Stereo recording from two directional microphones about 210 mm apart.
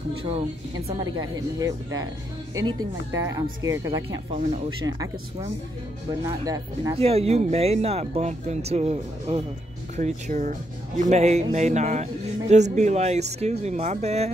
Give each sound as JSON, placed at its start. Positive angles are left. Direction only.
{"t": 1.1, "sound": "speech", "side_deg": -15}
{"t": 6.4, "sound": "speech", "side_deg": -15}
{"t": 7.0, "sound": "speech", "side_deg": -30}